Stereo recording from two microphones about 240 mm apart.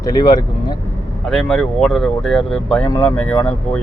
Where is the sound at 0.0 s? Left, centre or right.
Centre.